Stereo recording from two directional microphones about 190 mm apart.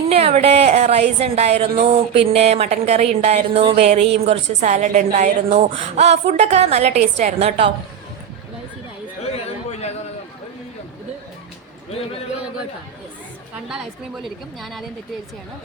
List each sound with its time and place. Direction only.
0.1 s a sound: 30° right (ahead or behind)
9.2 s chatter: 35° left (ahead or behind)
14.6 s speech: centre (ahead or behind)